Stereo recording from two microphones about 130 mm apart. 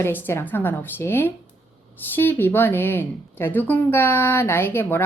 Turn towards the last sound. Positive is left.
turn(degrees=15)  # may be behind; listen again after turning